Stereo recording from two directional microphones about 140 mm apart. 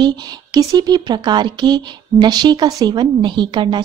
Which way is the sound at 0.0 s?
30° right (ahead or behind).